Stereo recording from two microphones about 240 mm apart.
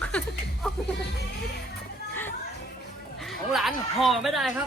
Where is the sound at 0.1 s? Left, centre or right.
Centre.